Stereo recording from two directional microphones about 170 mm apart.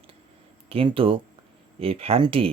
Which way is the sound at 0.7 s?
30° right (ahead or behind).